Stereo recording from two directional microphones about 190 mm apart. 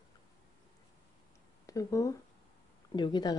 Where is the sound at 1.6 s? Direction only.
15° left (ahead or behind).